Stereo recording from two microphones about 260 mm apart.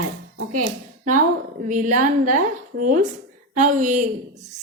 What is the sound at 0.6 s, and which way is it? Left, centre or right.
A woman's voice, right.